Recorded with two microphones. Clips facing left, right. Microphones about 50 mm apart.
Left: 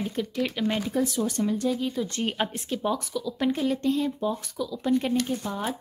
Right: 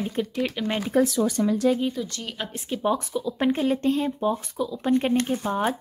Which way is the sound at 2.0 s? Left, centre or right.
Left.